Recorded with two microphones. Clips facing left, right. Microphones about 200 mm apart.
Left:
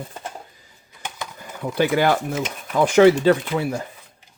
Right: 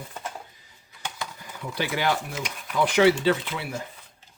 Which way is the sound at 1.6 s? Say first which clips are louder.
Left 8 dB; 50° left (ahead or behind).